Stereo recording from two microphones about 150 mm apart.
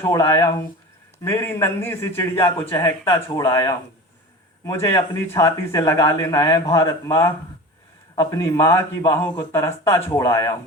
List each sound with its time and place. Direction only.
0.0 s a man's voice: 25° left (ahead or behind)